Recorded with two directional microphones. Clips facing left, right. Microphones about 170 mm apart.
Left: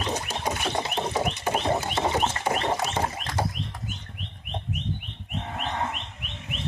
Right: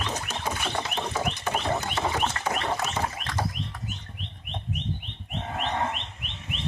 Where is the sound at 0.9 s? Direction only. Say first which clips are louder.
Left 2 dB; 25° left (ahead or behind).